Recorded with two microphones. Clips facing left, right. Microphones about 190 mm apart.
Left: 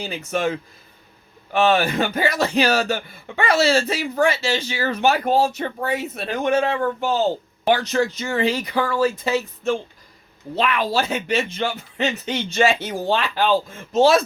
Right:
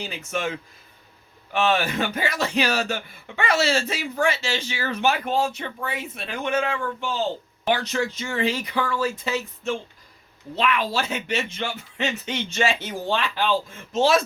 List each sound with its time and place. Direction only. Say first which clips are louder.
0.0 s speech: left 5 dB; 40° left (ahead or behind)
1.5 s speech: left 4 dB; 40° left (ahead or behind)